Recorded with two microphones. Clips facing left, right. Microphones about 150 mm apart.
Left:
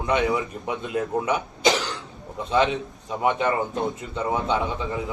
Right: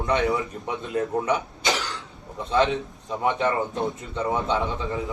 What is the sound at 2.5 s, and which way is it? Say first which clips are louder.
Speech: even; 15° left (ahead or behind).